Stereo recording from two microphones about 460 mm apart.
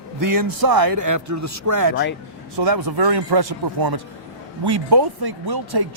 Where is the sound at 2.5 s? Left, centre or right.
Right.